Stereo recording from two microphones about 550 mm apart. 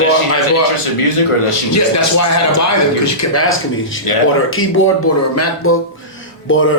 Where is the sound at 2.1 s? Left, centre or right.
Left.